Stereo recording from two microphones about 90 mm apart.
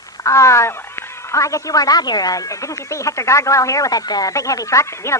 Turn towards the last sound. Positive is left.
turn(degrees=35)  # may be behind; listen again after turning